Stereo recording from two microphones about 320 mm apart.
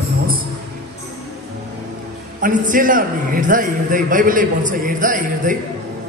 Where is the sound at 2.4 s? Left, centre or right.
Right.